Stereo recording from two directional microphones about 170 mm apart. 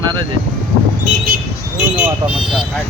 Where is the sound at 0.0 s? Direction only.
25° right (ahead or behind).